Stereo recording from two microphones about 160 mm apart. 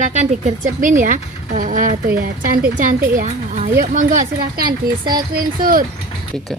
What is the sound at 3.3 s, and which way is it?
Speech, 45° right (ahead or behind).